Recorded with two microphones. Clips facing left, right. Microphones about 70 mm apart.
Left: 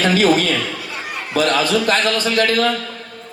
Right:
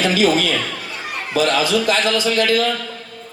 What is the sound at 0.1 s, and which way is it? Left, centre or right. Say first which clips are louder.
A man's voice: left 1 dB; left.